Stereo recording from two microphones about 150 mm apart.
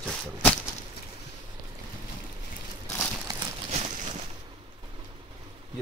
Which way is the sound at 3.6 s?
50° right (ahead or behind).